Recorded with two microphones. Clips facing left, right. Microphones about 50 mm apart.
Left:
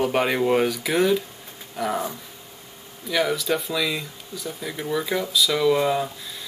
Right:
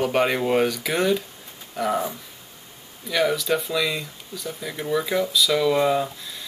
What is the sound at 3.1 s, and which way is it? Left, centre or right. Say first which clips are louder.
Speech: right 1 dB; centre.